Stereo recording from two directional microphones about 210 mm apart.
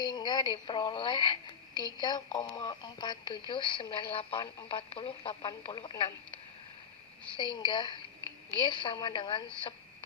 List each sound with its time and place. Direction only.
0.0 s speech: 20° left (ahead or behind)